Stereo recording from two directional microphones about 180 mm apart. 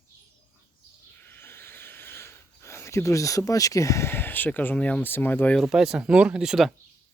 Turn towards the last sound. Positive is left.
turn(degrees=0)  # may be behind; listen again after turning